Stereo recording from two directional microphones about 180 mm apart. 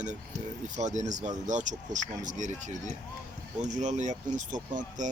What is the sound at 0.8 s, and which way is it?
Speech, 40° right (ahead or behind).